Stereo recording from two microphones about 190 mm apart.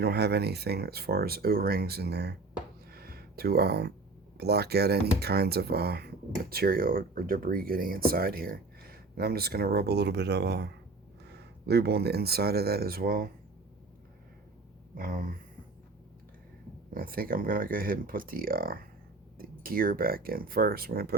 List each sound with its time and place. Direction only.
0.0 s speech: 60° right (ahead or behind)
2.9 s a sound: 55° right (ahead or behind)
4.4 s speech: 60° right (ahead or behind)
14.9 s speech: 45° right (ahead or behind)
16.9 s speech: 50° right (ahead or behind)